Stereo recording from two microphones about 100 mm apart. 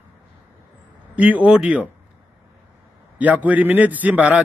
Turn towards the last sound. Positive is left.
turn(degrees=-15)  # may be behind; listen again after turning